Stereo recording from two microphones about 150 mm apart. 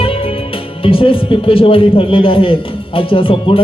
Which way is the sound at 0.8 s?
35° left (ahead or behind).